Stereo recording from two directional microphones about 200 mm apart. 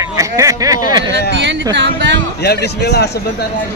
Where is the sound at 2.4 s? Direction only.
55° left (ahead or behind).